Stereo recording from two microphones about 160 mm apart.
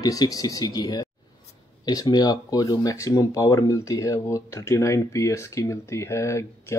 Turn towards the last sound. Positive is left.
turn(degrees=15)  # may be behind; listen again after turning